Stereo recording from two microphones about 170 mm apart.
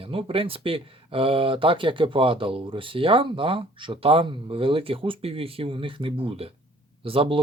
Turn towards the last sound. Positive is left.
turn(degrees=-30)  # may be behind; listen again after turning